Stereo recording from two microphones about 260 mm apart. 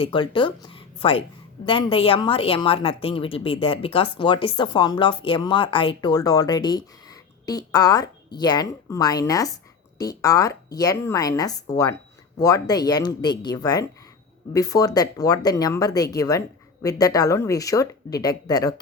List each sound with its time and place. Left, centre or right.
0.0 s a woman's voice: centre